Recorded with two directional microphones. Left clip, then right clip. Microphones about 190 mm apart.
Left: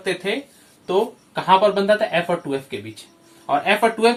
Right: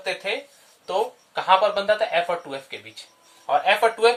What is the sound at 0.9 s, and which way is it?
Speech, 20° right (ahead or behind).